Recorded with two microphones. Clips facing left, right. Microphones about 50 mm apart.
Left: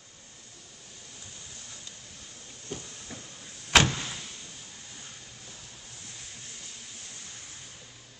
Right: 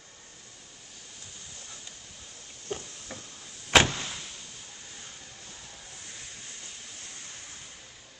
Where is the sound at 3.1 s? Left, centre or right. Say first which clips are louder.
Right 1 dB; centre.